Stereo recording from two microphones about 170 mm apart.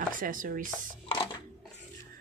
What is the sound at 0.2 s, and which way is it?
Speech, 55° right (ahead or behind).